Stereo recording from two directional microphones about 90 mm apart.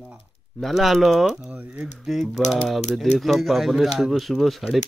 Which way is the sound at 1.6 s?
15° right (ahead or behind).